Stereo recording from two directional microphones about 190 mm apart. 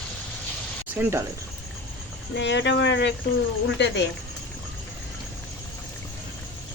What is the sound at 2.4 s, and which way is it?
Speech, 70° left (ahead or behind).